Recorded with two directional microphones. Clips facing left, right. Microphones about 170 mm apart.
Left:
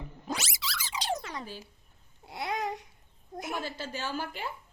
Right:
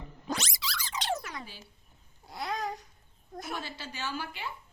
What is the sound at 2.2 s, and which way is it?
Babbling, 20° left (ahead or behind).